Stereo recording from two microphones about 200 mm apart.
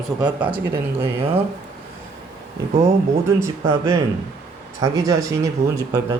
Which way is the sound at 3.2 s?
15° right (ahead or behind).